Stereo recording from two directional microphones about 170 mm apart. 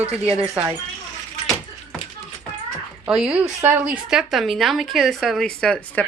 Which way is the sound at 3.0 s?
5° right (ahead or behind).